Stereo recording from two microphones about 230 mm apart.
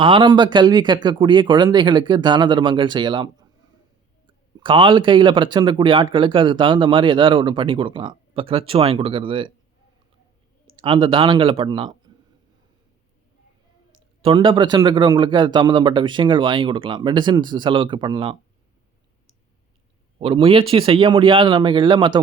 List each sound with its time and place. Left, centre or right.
0.0 s speech: right
4.3 s speech: right
10.8 s speech: right
14.2 s speech: right
20.1 s speech: right